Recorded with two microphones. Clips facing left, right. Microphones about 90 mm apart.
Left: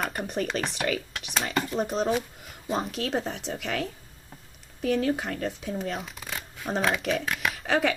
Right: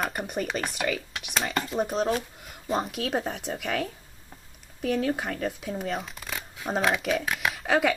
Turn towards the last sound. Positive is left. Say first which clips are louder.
# right 1 dB
turn(degrees=-5)  # may be behind; listen again after turning